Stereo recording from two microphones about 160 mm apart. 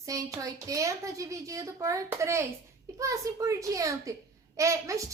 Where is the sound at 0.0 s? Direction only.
20° right (ahead or behind).